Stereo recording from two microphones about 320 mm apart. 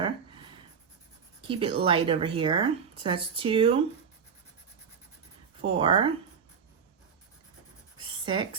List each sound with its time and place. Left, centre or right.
1.5 s speech: centre
5.6 s speech: centre
8.2 s speech: centre